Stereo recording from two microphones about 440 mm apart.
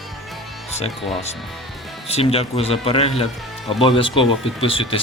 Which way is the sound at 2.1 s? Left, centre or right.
Centre.